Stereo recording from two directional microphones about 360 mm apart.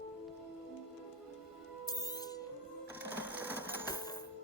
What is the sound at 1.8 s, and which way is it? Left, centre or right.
Music, centre.